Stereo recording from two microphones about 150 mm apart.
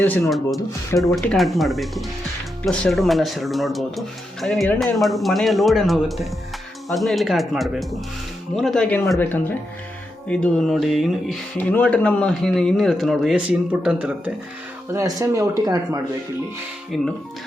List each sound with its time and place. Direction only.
0.0 s speech: 15° left (ahead or behind)
0.3 s speech: centre (ahead or behind)
11.5 s speech: 10° left (ahead or behind); by 14.3 s 10° right (ahead or behind)
14.9 s speech: 20° right (ahead or behind)
16.9 s speech: centre (ahead or behind)